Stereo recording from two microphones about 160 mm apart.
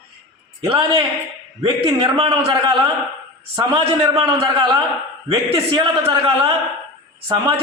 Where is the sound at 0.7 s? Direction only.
35° right (ahead or behind).